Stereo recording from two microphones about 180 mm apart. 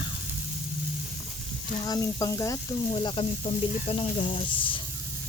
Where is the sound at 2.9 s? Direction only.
30° left (ahead or behind).